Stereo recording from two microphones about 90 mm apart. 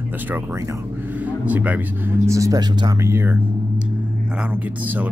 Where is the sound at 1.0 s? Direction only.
20° right (ahead or behind).